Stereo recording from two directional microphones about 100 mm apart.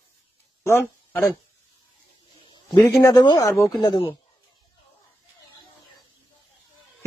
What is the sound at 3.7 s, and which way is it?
Speech, 50° left (ahead or behind).